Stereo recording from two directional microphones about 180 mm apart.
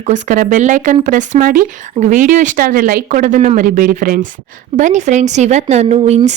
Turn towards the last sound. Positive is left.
turn(degrees=-40)  # may be behind; listen again after turning